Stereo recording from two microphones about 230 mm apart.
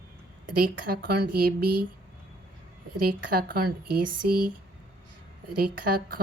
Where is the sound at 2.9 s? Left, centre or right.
Right.